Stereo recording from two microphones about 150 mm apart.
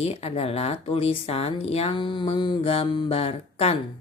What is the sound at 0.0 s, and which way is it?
Speech, 40° left (ahead or behind).